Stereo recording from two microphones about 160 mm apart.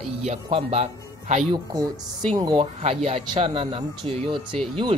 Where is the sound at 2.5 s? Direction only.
40° right (ahead or behind).